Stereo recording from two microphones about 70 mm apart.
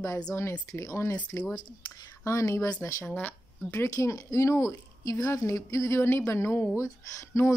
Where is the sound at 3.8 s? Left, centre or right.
Left.